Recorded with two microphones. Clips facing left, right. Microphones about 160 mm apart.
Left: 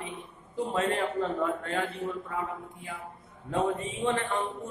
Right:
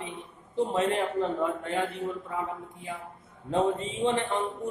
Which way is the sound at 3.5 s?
20° right (ahead or behind).